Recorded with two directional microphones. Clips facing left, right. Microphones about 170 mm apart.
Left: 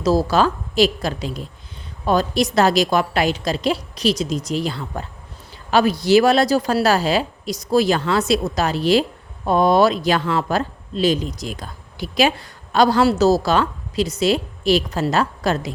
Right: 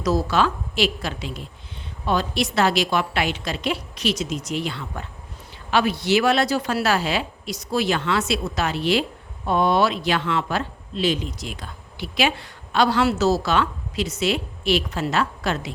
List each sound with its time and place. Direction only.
0.0 s speech: 35° left (ahead or behind)